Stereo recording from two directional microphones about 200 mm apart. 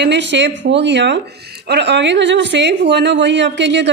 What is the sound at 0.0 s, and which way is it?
A woman's voice, 60° right (ahead or behind).